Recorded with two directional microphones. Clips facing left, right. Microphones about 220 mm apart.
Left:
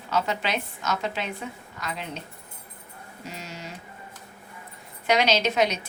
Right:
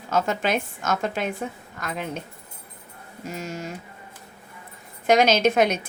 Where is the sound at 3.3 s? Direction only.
50° right (ahead or behind).